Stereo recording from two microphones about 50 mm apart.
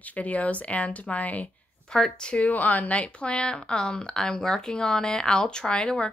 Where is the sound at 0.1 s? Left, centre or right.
Left.